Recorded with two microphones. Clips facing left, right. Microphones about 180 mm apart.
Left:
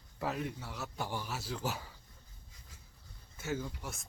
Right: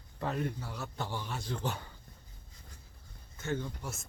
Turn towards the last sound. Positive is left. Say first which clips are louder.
# right 2 dB
turn(degrees=0)  # may be behind; listen again after turning